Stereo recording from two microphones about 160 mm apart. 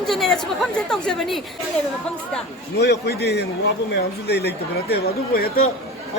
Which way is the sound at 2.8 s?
90° left.